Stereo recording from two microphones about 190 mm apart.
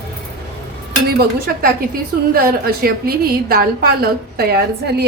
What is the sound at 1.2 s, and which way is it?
A woman's voice, 50° right (ahead or behind).